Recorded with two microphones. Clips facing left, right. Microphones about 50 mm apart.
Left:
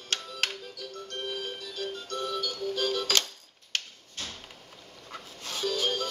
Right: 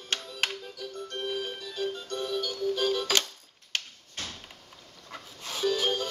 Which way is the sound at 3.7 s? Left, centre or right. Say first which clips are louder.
Even; centre.